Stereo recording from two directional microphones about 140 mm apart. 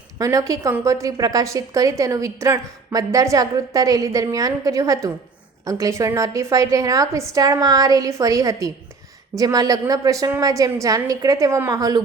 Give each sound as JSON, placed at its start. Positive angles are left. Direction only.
{"t": 0.2, "sound": "a woman's voice", "side_deg": -25}